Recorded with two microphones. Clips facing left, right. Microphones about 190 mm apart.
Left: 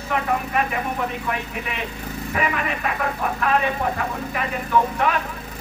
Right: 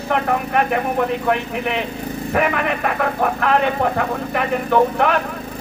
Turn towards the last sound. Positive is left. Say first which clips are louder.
# right 5 dB
turn(degrees=-60)  # may be behind; listen again after turning